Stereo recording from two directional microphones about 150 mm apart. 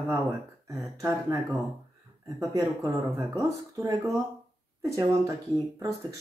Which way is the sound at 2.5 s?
25° right (ahead or behind).